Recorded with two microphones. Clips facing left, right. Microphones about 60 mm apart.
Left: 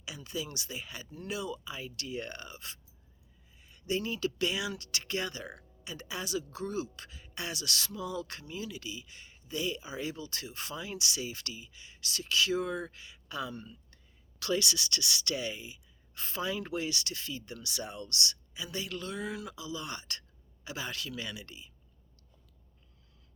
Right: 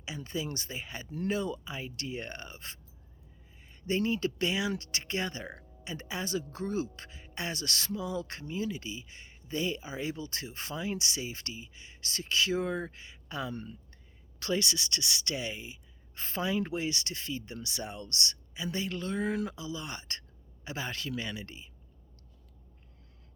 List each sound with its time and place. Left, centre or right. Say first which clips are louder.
0.0 s speech: right 3 dB; right
19.5 s speech: even; right